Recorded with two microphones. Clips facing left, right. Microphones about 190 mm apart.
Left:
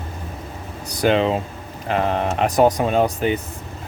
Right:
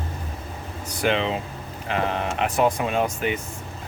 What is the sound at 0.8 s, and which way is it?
Speech, 40° left (ahead or behind).